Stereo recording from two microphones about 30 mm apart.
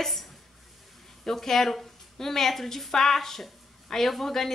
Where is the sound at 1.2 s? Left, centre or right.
Centre.